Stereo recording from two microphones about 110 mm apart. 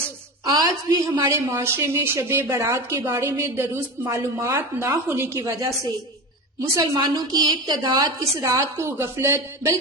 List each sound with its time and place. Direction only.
0.4 s a woman's voice: 35° right (ahead or behind)
1.5 s a woman's voice: 20° right (ahead or behind)